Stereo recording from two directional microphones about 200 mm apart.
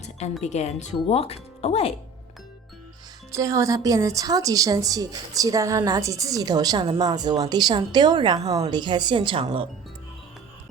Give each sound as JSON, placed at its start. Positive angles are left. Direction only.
{"t": 0.4, "sound": "speech", "side_deg": 35}
{"t": 3.3, "sound": "a woman's voice", "side_deg": -15}